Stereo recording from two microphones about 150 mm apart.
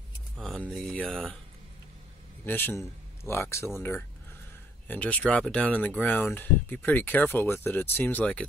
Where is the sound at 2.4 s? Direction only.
15° left (ahead or behind).